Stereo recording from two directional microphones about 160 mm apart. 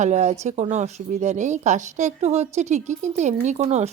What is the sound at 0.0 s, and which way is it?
Speech, 45° right (ahead or behind).